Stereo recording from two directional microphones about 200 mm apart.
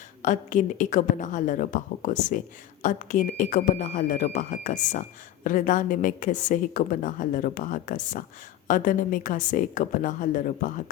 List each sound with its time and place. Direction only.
0.2 s speech: 40° left (ahead or behind)